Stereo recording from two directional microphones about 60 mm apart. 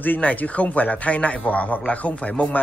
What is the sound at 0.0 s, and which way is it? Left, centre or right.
Speech, left.